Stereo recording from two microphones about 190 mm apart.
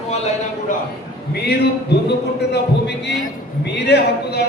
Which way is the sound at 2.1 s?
65° left (ahead or behind).